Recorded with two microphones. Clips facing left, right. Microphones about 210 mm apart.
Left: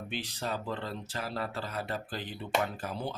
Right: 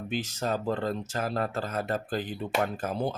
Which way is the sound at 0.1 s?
45° right (ahead or behind).